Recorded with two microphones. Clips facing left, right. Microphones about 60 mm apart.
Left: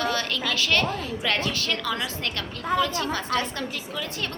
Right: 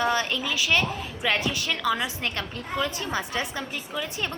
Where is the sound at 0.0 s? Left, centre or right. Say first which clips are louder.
Right 2 dB; centre.